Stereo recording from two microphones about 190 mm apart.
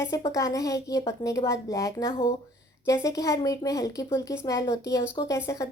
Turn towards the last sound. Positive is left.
turn(degrees=20)  # may be behind; listen again after turning